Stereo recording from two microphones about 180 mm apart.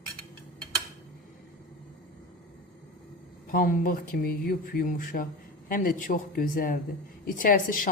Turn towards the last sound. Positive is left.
turn(degrees=50)  # may be behind; listen again after turning